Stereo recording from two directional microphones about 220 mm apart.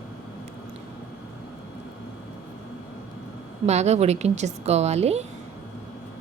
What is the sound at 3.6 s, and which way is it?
A woman's voice, 30° right (ahead or behind).